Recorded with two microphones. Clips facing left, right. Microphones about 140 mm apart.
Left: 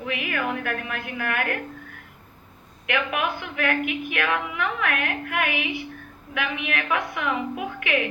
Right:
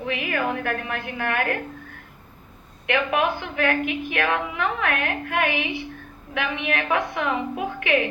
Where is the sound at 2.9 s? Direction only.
30° right (ahead or behind).